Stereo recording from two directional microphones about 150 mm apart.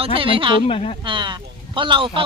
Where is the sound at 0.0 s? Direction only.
35° right (ahead or behind).